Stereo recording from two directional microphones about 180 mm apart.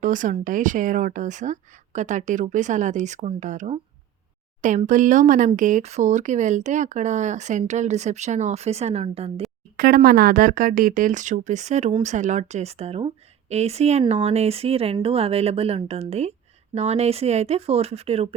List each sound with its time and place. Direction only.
0.0 s a woman's voice: 45° right (ahead or behind)
4.9 s a woman's voice: 45° right (ahead or behind)
9.7 s a woman's voice: 55° right (ahead or behind); by 18.3 s 35° right (ahead or behind)